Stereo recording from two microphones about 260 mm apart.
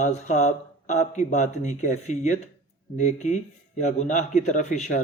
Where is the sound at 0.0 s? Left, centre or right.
Left.